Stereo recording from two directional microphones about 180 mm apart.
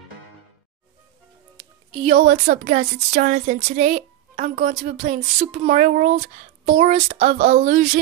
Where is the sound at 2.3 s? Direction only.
60° right (ahead or behind).